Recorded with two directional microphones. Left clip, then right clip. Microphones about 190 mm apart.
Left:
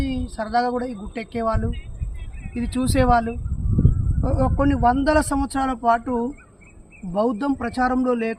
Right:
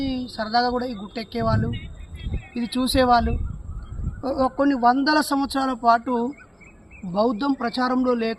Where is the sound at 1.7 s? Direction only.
45° left (ahead or behind).